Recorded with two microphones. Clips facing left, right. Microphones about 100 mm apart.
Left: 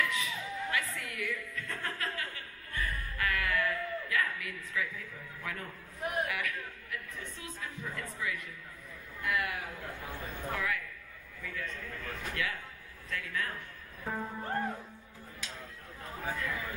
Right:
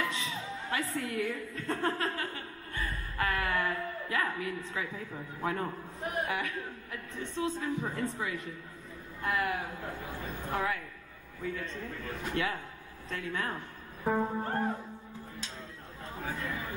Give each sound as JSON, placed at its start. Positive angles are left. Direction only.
{"t": 0.0, "sound": "a woman's voice", "side_deg": -30}